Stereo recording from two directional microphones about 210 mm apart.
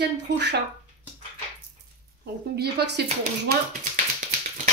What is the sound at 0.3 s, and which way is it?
Speech, 55° right (ahead or behind).